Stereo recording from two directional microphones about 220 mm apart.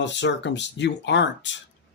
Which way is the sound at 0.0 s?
55° left (ahead or behind).